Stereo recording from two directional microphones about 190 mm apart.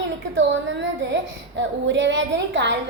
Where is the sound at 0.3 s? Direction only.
75° right (ahead or behind).